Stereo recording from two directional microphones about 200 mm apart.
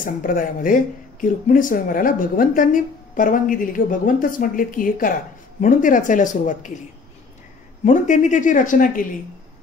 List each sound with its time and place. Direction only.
0.0 s a woman's voice: 45° left (ahead or behind)
7.8 s speech: 35° left (ahead or behind)